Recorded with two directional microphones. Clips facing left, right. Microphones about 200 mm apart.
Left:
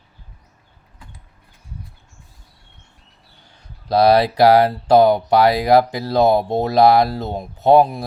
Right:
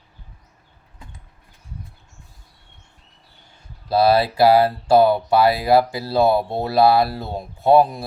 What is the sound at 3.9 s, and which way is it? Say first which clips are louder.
Speech: left 2 dB; 15° left (ahead or behind).